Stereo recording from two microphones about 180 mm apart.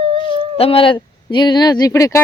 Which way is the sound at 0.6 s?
30° left (ahead or behind).